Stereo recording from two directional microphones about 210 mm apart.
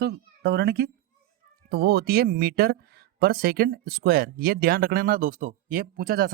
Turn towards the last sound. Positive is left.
turn(degrees=-45)  # may be behind; listen again after turning